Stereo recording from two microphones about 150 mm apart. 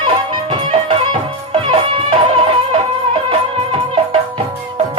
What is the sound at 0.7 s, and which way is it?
Music, 40° right (ahead or behind).